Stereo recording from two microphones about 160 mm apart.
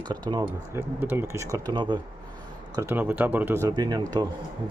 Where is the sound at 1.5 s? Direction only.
25° right (ahead or behind).